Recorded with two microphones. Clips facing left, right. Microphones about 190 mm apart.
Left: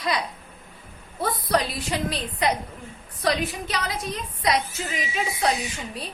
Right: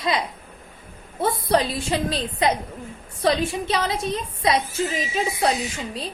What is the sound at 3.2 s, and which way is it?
A woman's voice, 25° right (ahead or behind).